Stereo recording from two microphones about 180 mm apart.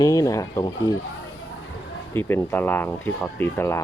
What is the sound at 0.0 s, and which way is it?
Speech, 20° left (ahead or behind).